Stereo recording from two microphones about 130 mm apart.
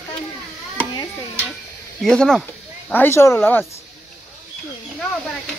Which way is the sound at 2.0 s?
5° left (ahead or behind).